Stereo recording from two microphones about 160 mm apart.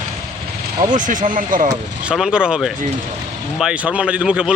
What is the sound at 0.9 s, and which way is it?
Speech, 55° right (ahead or behind).